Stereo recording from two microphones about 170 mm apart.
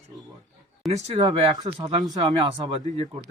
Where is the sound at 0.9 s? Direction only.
40° right (ahead or behind).